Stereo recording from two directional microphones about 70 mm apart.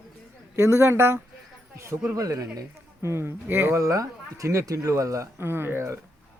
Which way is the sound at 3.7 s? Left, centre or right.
Right.